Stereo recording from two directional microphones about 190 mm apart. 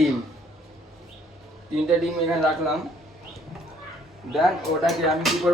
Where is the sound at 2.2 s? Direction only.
Centre (ahead or behind).